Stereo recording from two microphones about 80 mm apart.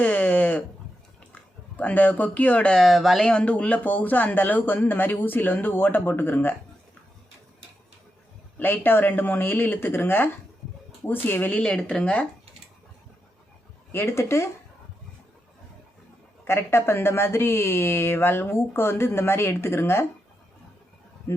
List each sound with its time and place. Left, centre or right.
0.0 s a sound: centre
1.8 s speech: centre
2.7 s speech: centre
3.2 s speech: centre
8.5 s speech: left
13.9 s speech: left
16.4 s speech: left
21.3 s speech: left